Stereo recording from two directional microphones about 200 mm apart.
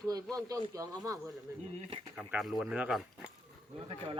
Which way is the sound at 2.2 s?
5° right (ahead or behind).